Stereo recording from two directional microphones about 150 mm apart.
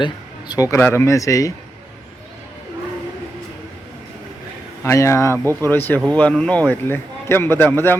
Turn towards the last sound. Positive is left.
turn(degrees=15)  # may be behind; listen again after turning